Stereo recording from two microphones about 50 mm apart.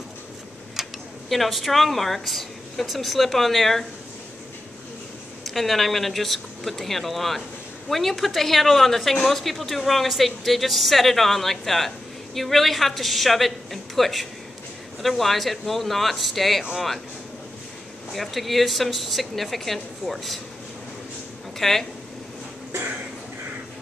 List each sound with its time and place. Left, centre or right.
0.8 s tick-tock: centre
1.3 s a man's voice: centre
5.4 s a man's voice: centre
18.1 s a man's voice: centre
21.5 s speech: centre
22.7 s a sound: right